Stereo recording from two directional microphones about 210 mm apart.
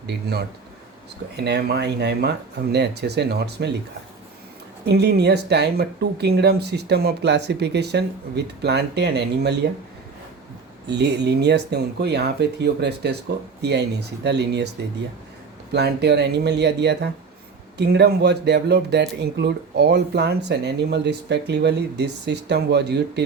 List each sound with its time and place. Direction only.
0.1 s speech: 50° right (ahead or behind)
4.9 s speech: 50° right (ahead or behind)
10.8 s speech: 55° right (ahead or behind)
15.7 s speech: 50° right (ahead or behind)